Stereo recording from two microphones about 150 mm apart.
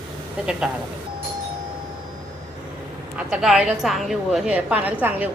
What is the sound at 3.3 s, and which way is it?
A woman's voice, 5° right (ahead or behind).